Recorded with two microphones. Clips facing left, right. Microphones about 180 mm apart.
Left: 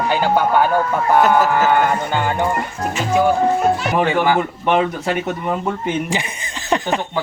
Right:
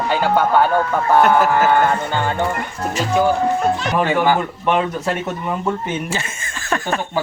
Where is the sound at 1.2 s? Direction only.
Centre (ahead or behind).